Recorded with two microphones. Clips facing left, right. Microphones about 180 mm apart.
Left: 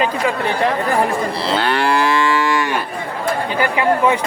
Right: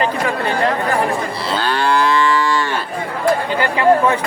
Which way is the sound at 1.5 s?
25° left (ahead or behind).